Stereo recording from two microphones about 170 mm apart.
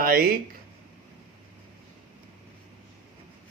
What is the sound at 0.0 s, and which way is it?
Speech, 60° right (ahead or behind).